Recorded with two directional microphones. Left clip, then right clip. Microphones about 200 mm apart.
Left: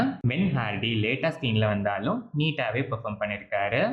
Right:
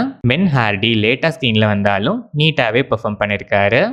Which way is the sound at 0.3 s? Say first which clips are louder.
Right 13 dB; 55° right (ahead or behind).